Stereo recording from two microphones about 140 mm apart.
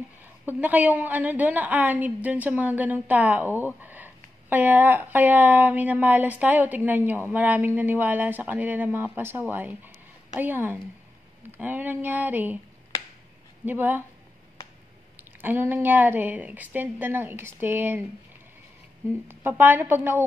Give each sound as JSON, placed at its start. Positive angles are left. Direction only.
{"t": 0.2, "sound": "a woman's voice", "side_deg": -10}
{"t": 13.7, "sound": "a woman's voice", "side_deg": -15}
{"t": 15.4, "sound": "a woman's voice", "side_deg": -15}
{"t": 19.2, "sound": "a woman's voice", "side_deg": -15}